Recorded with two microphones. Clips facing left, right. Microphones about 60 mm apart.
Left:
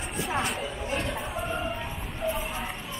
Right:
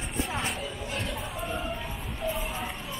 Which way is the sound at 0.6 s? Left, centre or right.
Centre.